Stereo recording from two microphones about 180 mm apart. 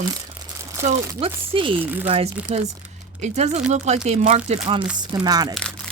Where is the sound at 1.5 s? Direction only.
30° right (ahead or behind).